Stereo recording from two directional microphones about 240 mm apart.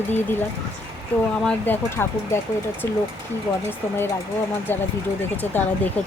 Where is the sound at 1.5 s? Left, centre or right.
Centre.